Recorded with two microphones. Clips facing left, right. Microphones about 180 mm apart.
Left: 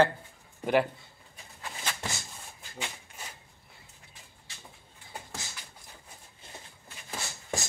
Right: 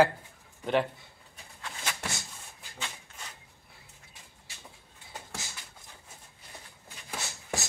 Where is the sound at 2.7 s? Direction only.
10° left (ahead or behind).